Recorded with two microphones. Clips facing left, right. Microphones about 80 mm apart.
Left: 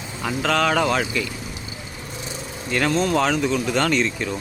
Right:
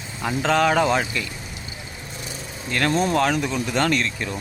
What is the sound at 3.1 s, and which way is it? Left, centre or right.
Speech, centre.